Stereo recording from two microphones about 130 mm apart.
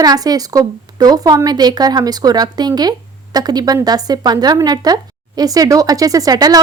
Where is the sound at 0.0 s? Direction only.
30° right (ahead or behind).